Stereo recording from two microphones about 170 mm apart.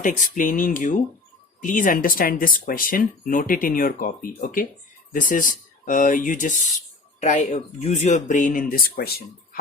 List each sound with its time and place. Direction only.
0.0 s speech: 50° left (ahead or behind)